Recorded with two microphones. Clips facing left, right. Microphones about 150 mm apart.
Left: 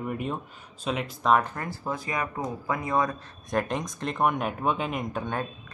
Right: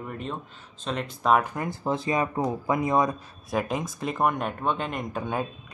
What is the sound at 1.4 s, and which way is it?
Speech, 15° right (ahead or behind).